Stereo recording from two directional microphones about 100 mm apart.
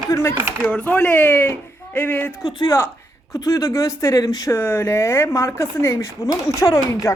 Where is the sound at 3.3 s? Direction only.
35° left (ahead or behind).